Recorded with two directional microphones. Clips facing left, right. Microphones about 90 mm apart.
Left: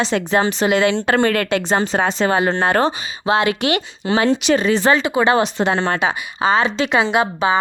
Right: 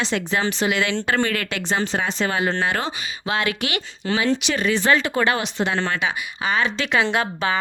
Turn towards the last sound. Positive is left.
turn(degrees=20)  # may be behind; listen again after turning